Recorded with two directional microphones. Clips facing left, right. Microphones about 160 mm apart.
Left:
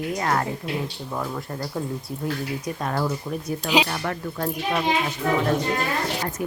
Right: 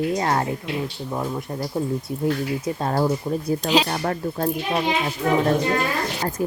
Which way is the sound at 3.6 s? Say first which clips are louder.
Even; 10° left (ahead or behind).